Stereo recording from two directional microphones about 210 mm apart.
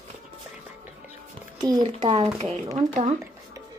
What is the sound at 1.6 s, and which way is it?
A woman's voice, 20° right (ahead or behind).